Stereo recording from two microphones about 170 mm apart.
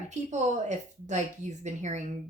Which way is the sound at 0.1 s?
45° right (ahead or behind).